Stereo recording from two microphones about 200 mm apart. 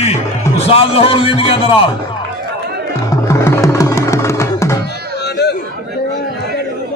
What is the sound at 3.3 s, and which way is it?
Music, 15° left (ahead or behind).